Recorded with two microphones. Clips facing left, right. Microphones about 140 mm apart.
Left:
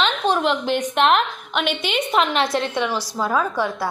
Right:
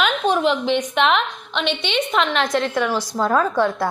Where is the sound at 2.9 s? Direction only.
10° left (ahead or behind).